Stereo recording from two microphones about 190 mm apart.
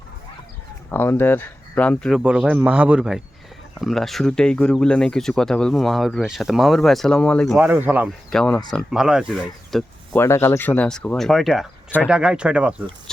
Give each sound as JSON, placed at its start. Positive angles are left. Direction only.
{"t": 0.9, "sound": "speech", "side_deg": 10}
{"t": 7.6, "sound": "speech", "side_deg": -10}
{"t": 8.3, "sound": "speech", "side_deg": 5}